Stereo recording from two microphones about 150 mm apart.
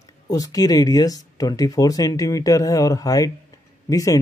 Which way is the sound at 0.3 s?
25° left (ahead or behind).